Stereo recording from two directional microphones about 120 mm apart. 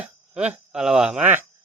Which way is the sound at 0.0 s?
10° right (ahead or behind).